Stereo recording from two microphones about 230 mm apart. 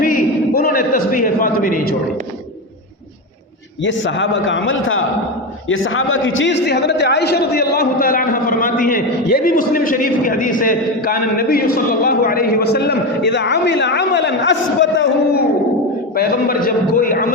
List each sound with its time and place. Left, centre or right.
0.0 s a sound: left
3.8 s a man's voice: left
16.1 s a man's voice: left